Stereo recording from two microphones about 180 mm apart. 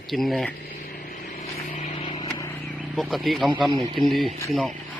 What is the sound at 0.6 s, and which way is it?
Vehicle, 55° left (ahead or behind).